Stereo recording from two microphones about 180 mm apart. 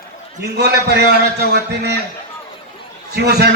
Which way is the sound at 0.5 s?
65° right (ahead or behind).